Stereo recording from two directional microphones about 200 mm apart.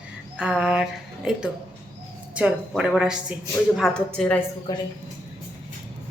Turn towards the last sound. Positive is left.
turn(degrees=20)  # may be behind; listen again after turning